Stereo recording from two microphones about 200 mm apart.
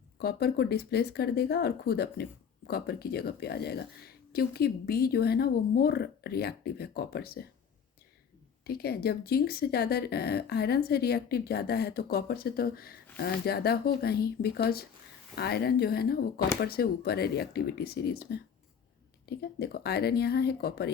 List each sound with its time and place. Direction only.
0.2 s speech: 50° left (ahead or behind)
8.6 s speech: 50° left (ahead or behind)